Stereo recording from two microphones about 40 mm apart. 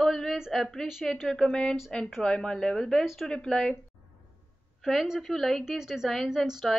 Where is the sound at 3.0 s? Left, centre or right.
Centre.